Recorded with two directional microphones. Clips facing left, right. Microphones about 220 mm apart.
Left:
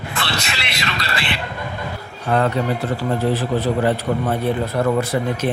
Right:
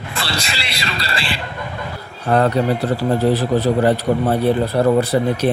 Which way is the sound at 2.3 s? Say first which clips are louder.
Right 3 dB; 40° right (ahead or behind).